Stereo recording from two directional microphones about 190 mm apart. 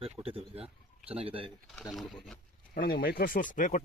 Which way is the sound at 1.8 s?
Centre (ahead or behind).